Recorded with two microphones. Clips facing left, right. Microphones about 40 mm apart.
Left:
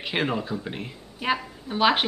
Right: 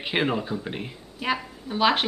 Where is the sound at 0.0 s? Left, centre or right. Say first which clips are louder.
Right 1 dB; centre.